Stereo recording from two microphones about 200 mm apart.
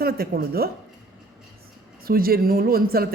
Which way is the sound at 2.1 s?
50° right (ahead or behind).